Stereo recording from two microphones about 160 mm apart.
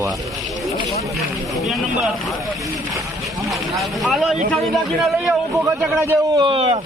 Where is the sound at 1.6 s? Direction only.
Centre (ahead or behind).